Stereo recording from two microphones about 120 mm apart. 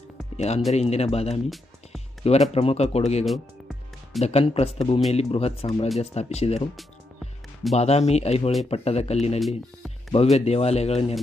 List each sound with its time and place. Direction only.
0.3 s speech: 65° left (ahead or behind)
3.2 s music: centre (ahead or behind)
4.2 s speech: 60° left (ahead or behind)
7.7 s speech: 60° left (ahead or behind)